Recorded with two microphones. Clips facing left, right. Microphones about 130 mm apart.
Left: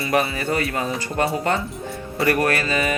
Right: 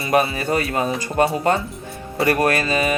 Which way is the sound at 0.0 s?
25° right (ahead or behind).